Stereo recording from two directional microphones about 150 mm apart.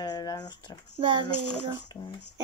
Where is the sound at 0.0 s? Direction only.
25° left (ahead or behind).